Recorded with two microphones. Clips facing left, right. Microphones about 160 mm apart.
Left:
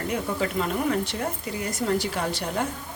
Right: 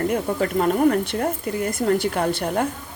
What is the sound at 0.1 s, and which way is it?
Speech, 50° right (ahead or behind).